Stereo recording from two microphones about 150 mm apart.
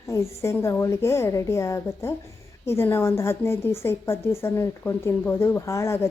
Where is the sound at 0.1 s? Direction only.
20° left (ahead or behind).